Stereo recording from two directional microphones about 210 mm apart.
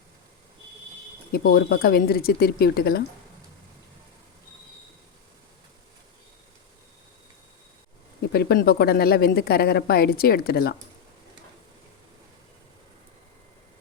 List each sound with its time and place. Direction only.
1.3 s a woman's voice: 45° left (ahead or behind)
8.3 s a woman's voice: 50° left (ahead or behind)